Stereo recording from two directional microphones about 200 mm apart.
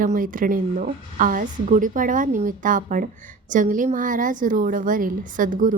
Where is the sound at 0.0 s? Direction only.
40° right (ahead or behind).